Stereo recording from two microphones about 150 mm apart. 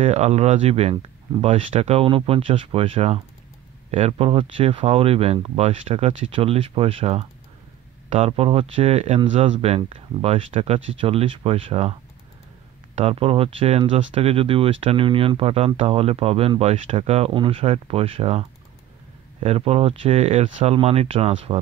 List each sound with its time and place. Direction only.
0.0 s speech: 50° right (ahead or behind)
12.9 s speech: 40° right (ahead or behind)
19.4 s speech: 40° right (ahead or behind)